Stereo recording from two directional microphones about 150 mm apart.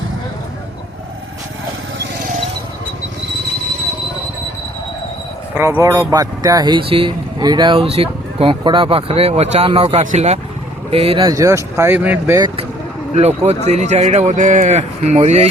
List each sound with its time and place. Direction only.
5.5 s speech: 20° right (ahead or behind); by 11.3 s 40° right (ahead or behind)
11.3 s speech: 20° right (ahead or behind)
13.1 s speech: 45° right (ahead or behind)